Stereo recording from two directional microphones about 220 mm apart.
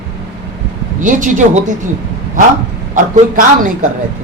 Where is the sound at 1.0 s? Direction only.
35° right (ahead or behind).